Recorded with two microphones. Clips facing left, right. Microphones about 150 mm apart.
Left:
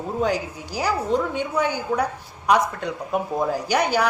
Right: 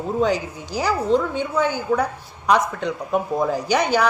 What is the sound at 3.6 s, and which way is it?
Speech, 10° left (ahead or behind).